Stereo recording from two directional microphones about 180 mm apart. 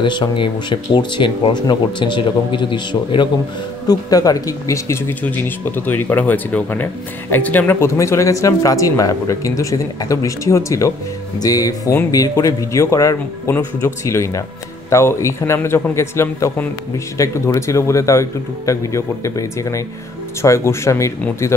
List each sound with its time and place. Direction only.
0.0 s speech: 25° left (ahead or behind)